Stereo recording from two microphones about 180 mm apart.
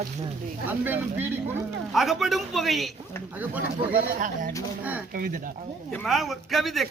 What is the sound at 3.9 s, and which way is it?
Speech, 50° right (ahead or behind).